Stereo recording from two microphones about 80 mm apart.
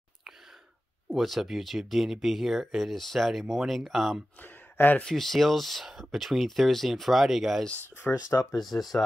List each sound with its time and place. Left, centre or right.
1.1 s speech: centre
4.4 s a sound: left
5.0 s speech: centre
8.0 s speech: centre